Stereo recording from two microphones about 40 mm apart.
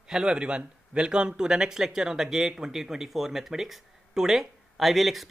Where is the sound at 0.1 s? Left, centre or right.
Right.